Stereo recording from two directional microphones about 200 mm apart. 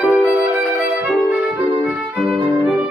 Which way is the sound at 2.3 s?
5° right (ahead or behind).